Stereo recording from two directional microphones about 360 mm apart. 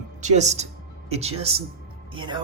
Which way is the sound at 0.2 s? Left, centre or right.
Centre.